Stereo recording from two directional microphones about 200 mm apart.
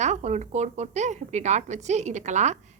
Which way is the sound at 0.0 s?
35° right (ahead or behind).